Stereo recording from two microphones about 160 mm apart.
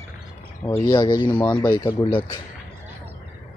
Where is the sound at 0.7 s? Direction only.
25° left (ahead or behind).